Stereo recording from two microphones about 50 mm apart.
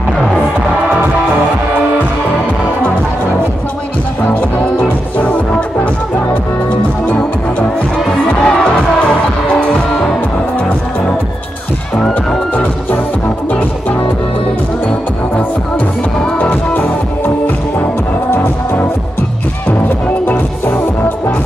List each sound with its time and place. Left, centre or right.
8.3 s music: left
16.3 s music: left